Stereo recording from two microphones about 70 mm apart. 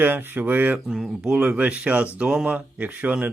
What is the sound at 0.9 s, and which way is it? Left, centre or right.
Speech, centre.